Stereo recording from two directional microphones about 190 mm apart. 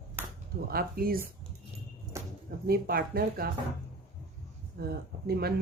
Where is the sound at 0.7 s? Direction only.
50° right (ahead or behind).